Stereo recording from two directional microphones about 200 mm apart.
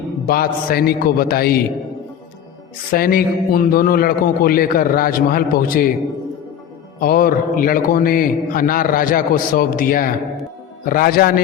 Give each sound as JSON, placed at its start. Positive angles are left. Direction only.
{"t": 0.3, "sound": "a man's voice", "side_deg": 50}
{"t": 2.9, "sound": "a man's voice", "side_deg": 45}
{"t": 7.0, "sound": "a man's voice", "side_deg": 45}